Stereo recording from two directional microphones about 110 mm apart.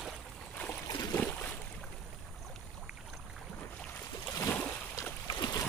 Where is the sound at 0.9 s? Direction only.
30° left (ahead or behind).